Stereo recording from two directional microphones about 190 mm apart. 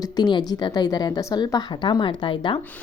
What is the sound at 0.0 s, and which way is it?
A woman's voice, 25° left (ahead or behind).